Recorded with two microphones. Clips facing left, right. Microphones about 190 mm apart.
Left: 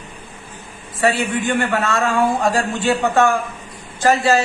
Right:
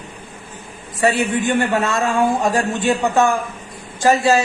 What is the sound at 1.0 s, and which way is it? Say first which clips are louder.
A man's voice: right 1 dB; 20° right (ahead or behind).